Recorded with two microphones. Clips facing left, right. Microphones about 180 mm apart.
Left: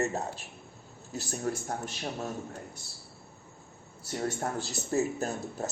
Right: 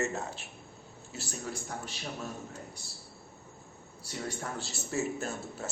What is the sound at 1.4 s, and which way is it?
A man's voice, 50° left (ahead or behind).